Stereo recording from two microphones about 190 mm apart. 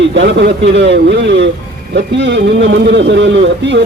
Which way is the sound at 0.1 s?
70° right (ahead or behind).